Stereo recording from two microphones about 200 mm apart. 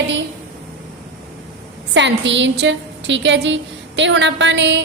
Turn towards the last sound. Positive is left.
turn(degrees=-60)  # may be behind; listen again after turning